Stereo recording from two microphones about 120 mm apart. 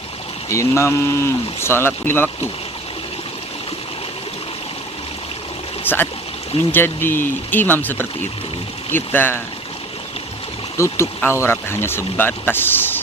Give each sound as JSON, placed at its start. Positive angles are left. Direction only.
{"t": 0.5, "sound": "speech", "side_deg": 25}
{"t": 5.8, "sound": "speech", "side_deg": 15}
{"t": 10.8, "sound": "speech", "side_deg": 25}